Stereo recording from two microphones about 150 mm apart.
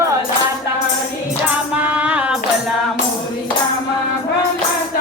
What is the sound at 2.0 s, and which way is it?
Music, 10° right (ahead or behind).